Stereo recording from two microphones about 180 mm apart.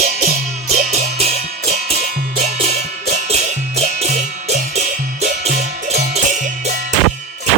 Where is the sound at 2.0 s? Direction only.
55° right (ahead or behind).